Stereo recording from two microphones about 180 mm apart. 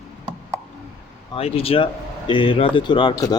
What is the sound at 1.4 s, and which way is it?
Speech, 30° left (ahead or behind).